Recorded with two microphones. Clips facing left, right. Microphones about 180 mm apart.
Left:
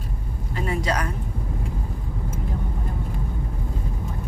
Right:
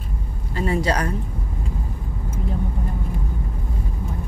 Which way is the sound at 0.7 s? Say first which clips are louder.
Right 4 dB; 35° right (ahead or behind).